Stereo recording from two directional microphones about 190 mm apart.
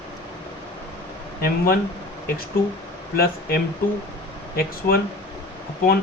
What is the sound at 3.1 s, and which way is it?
Speech, 55° left (ahead or behind).